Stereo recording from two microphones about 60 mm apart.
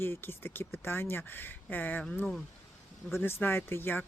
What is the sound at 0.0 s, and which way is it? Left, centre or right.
Speech, left.